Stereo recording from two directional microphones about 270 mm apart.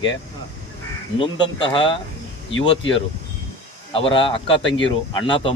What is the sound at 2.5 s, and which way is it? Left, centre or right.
Speech, left.